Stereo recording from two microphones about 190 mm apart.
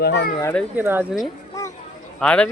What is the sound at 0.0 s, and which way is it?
Speech, 60° left (ahead or behind).